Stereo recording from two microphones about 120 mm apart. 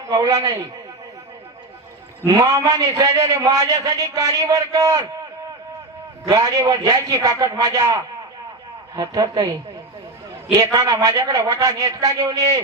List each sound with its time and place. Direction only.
0.1 s a man's voice: 30° right (ahead or behind)
2.2 s a man's voice: 30° right (ahead or behind)
6.2 s a man's voice: 30° right (ahead or behind)
9.0 s a man's voice: 35° right (ahead or behind)
10.6 s a man's voice: 30° right (ahead or behind)